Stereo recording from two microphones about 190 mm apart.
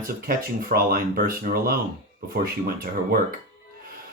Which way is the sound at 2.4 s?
50° right (ahead or behind).